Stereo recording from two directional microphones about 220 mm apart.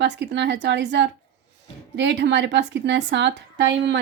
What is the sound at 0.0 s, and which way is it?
A woman's voice, 50° right (ahead or behind).